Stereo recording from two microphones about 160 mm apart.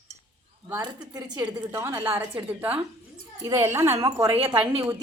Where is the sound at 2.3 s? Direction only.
10° right (ahead or behind).